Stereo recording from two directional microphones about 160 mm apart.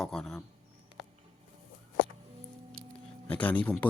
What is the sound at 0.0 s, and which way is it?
Speech, 5° left (ahead or behind).